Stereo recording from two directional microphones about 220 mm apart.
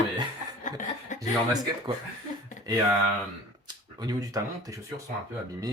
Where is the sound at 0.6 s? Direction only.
35° left (ahead or behind).